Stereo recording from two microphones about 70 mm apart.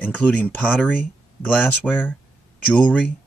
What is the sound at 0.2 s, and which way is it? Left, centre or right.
Speech, left.